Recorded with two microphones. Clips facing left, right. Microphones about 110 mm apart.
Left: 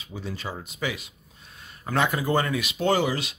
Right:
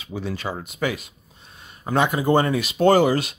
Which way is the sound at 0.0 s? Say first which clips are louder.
Right 6 dB; 75° right (ahead or behind).